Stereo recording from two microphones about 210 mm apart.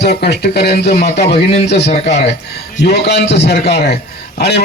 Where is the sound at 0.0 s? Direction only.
50° left (ahead or behind).